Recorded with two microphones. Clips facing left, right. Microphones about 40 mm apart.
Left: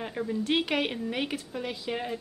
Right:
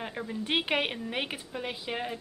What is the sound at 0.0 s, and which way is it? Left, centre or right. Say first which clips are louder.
Speech: left 4 dB; centre.